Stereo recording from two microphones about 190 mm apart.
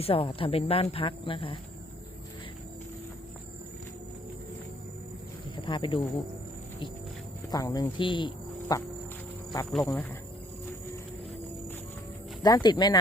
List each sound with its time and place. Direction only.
0.0 s speech: 30° left (ahead or behind)
5.6 s speech: 25° left (ahead or behind)
7.5 s speech: 20° left (ahead or behind)
9.7 s speech: 10° left (ahead or behind)
12.4 s speech: 20° left (ahead or behind)